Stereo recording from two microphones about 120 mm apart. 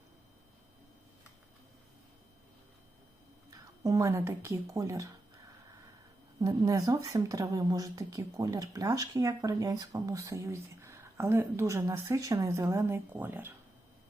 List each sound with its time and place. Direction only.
3.8 s speech: 25° right (ahead or behind)
6.4 s speech: 30° right (ahead or behind)